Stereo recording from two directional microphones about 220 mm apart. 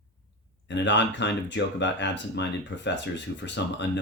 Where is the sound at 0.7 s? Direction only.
55° left (ahead or behind).